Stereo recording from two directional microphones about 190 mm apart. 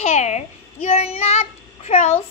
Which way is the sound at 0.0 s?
35° left (ahead or behind).